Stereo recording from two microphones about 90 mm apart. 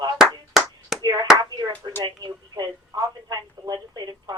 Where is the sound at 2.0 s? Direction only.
50° right (ahead or behind).